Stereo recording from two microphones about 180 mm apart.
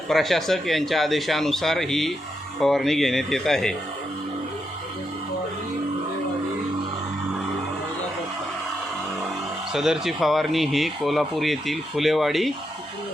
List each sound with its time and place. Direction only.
0.1 s speech: centre (ahead or behind)
9.7 s speech: centre (ahead or behind)